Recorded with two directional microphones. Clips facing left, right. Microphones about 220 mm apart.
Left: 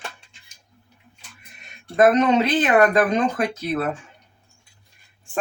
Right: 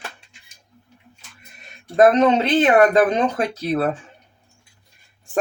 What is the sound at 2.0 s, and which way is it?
Speech, 30° right (ahead or behind).